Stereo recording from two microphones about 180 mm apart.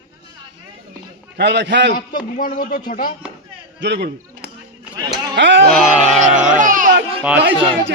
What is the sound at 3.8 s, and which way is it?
Speech, 70° right (ahead or behind).